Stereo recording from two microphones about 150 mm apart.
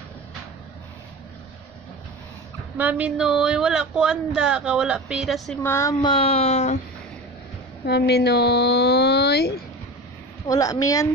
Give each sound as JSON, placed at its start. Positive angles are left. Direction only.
{"t": 2.8, "sound": "speech", "side_deg": -10}
{"t": 5.6, "sound": "a woman's voice", "side_deg": 20}
{"t": 6.0, "sound": "speech", "side_deg": 40}
{"t": 7.8, "sound": "speech", "side_deg": 90}
{"t": 10.4, "sound": "a woman's voice", "side_deg": 25}